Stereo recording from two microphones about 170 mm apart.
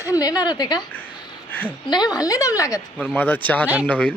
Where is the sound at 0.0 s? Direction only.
20° left (ahead or behind).